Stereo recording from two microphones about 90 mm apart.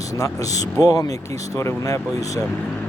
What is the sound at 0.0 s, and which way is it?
Vehicle, 40° left (ahead or behind).